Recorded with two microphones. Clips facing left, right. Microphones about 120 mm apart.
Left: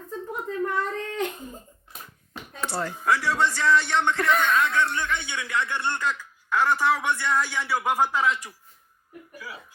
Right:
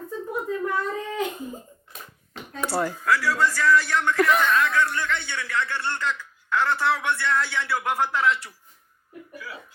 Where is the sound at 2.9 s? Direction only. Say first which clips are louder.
Even; 20° left (ahead or behind).